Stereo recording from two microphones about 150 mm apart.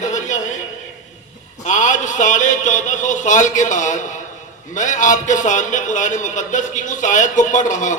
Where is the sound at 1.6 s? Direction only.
55° left (ahead or behind).